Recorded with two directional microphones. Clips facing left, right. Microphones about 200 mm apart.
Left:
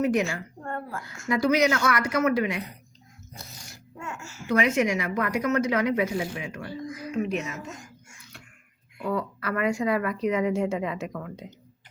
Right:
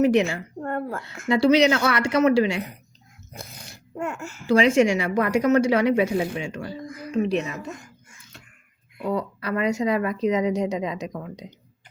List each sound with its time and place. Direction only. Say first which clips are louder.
0.0 s a woman's voice: right 5 dB; 25° right (ahead or behind)
0.7 s a sound: right 5 dB; 60° right (ahead or behind)
1.0 s a woman's voice: right 5 dB; 25° right (ahead or behind)
3.3 s a sound: right 5 dB; 55° right (ahead or behind)
4.4 s a woman's voice: right 6 dB; 30° right (ahead or behind)
6.8 s music: left 1 dB; 55° right (ahead or behind)
7.2 s speech: right 5 dB; 35° right (ahead or behind)
9.0 s a woman's voice: right 2 dB; 20° right (ahead or behind)